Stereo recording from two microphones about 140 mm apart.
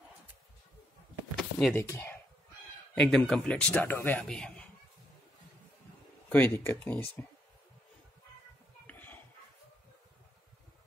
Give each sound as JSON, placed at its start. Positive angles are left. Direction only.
{"t": 1.3, "sound": "a sound", "side_deg": 0}
{"t": 1.8, "sound": "speech", "side_deg": 15}
{"t": 2.9, "sound": "speech", "side_deg": 5}
{"t": 4.2, "sound": "a man's voice", "side_deg": 5}
{"t": 6.2, "sound": "speech", "side_deg": 10}
{"t": 8.8, "sound": "a sound", "side_deg": 15}